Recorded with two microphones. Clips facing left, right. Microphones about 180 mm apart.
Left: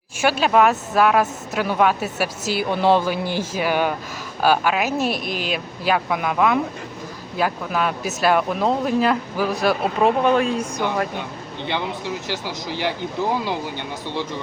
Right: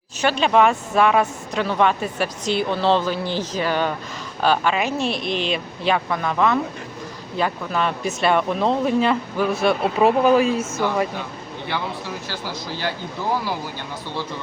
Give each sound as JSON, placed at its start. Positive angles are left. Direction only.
{"t": 0.2, "sound": "speech", "side_deg": 5}
{"t": 11.7, "sound": "speech", "side_deg": 20}